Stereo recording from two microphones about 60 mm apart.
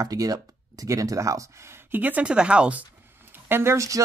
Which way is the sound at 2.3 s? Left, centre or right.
Centre.